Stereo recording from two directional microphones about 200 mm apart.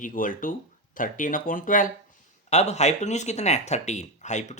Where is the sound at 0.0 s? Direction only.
40° left (ahead or behind).